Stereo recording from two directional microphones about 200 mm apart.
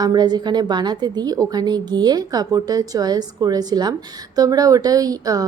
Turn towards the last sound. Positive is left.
turn(degrees=-15)  # may be behind; listen again after turning